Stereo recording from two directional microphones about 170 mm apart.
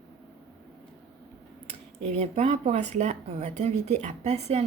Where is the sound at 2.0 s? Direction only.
40° right (ahead or behind).